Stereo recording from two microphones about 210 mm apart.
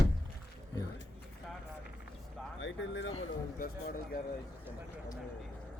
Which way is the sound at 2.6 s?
60° left (ahead or behind).